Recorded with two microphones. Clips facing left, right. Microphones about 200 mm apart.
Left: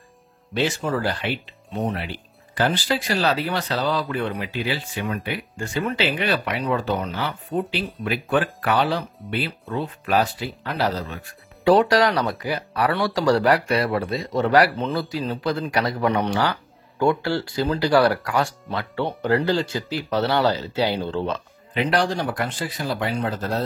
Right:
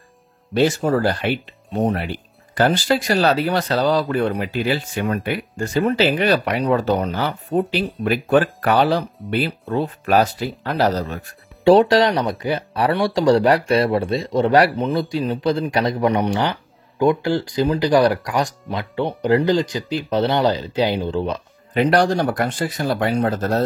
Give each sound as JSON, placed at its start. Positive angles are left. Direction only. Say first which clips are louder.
{"t": 0.6, "sound": "speech", "louder": "right 6 dB", "side_deg": -40}
{"t": 11.6, "sound": "speech", "louder": "right 4 dB", "side_deg": -25}
{"t": 21.7, "sound": "speech", "louder": "right 5 dB", "side_deg": -45}